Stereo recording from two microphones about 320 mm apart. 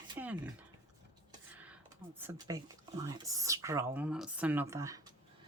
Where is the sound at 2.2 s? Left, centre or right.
Centre.